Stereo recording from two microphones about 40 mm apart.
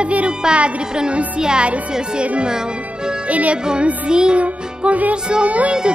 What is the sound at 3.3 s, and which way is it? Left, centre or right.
Music, right.